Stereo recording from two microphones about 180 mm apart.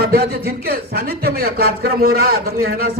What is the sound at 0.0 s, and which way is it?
A man's voice, 60° right (ahead or behind).